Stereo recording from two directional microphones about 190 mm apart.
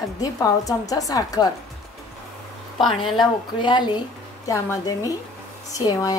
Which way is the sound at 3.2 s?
25° left (ahead or behind).